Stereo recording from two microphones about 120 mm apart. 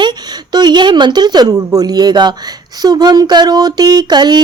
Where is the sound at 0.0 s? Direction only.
35° right (ahead or behind).